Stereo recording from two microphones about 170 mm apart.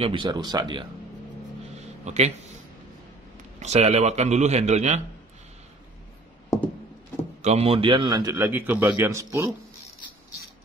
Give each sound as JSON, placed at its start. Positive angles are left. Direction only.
{"t": 0.0, "sound": "speech", "side_deg": -30}
{"t": 2.0, "sound": "a man's voice", "side_deg": -40}
{"t": 3.5, "sound": "a man's voice", "side_deg": -40}
{"t": 7.4, "sound": "a man's voice", "side_deg": -35}